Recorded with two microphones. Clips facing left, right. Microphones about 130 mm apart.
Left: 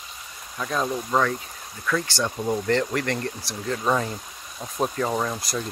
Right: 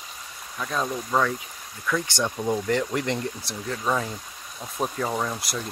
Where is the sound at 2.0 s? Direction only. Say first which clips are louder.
Even; 20° right (ahead or behind).